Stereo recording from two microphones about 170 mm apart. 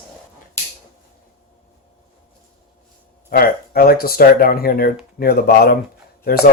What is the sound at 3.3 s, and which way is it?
Speech, 60° left (ahead or behind).